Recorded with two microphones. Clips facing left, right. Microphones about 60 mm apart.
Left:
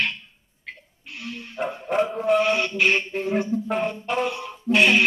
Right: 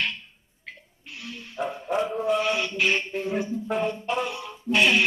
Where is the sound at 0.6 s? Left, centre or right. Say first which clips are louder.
Left 3 dB; centre.